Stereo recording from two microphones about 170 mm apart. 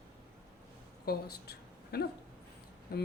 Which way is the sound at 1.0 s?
65° left (ahead or behind).